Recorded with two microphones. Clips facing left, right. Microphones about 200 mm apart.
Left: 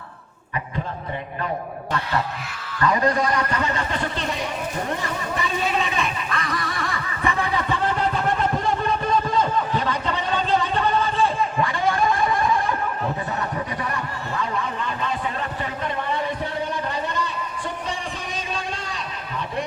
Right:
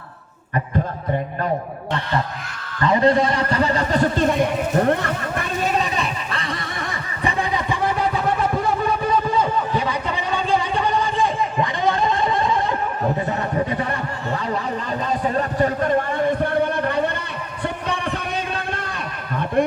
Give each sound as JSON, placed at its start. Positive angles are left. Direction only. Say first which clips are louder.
{"t": 2.8, "sound": "a man's voice", "louder": "right 4 dB", "side_deg": -25}
{"t": 5.6, "sound": "neigh", "louder": "right 4 dB", "side_deg": -35}
{"t": 13.8, "sound": "a sound", "louder": "right 3 dB", "side_deg": -35}